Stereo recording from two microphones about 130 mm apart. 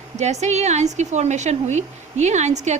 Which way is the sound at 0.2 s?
60° right (ahead or behind).